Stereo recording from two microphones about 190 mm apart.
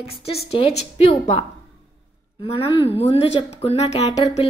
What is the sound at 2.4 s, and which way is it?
A woman's voice, 30° left (ahead or behind).